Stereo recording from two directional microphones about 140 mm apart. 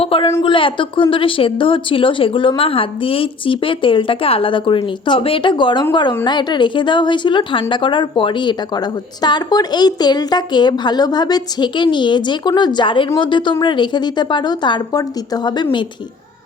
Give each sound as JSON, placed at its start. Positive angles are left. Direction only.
{"t": 0.0, "sound": "a woman's voice", "side_deg": 40}